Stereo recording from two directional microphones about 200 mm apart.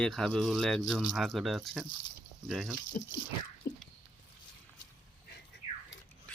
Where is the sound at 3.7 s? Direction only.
50° left (ahead or behind).